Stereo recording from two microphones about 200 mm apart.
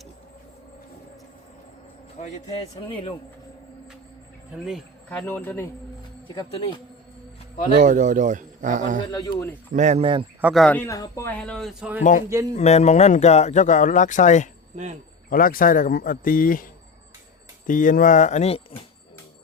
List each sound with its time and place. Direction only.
2.2 s speech: 35° left (ahead or behind)
2.8 s speech: 25° left (ahead or behind)
4.5 s speech: 5° right (ahead or behind)
5.0 s speech: 10° left (ahead or behind)
6.2 s speech: 25° left (ahead or behind)
7.8 s speech: 40° right (ahead or behind)
9.1 s speech: 20° left (ahead or behind)
9.7 s speech: 35° right (ahead or behind)
10.4 s speech: centre (ahead or behind)
12.5 s speech: 35° left (ahead or behind)
17.7 s speech: 40° left (ahead or behind)